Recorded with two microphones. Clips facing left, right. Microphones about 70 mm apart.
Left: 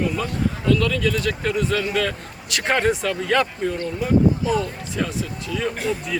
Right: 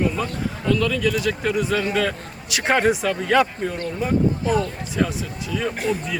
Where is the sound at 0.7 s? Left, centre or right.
Centre.